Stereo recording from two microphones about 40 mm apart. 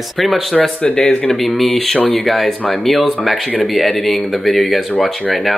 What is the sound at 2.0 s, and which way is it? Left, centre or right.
Speech, left.